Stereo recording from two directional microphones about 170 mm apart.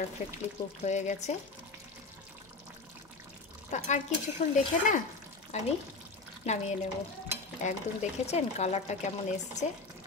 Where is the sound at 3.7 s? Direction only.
45° left (ahead or behind).